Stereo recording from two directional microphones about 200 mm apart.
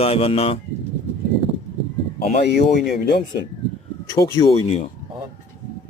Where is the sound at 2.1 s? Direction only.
45° left (ahead or behind).